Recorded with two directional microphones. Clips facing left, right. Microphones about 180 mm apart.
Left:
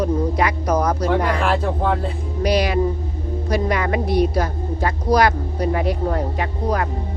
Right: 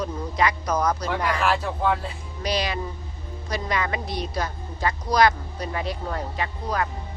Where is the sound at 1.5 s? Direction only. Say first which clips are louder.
Left 3 dB; 45° left (ahead or behind).